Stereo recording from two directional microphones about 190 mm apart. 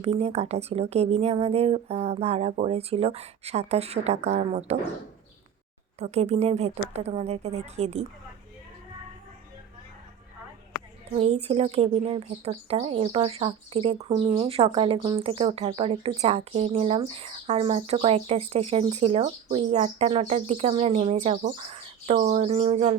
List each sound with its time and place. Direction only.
0.0 s speech: 35° right (ahead or behind)
6.0 s speech: 35° right (ahead or behind)
11.2 s speech: 30° right (ahead or behind)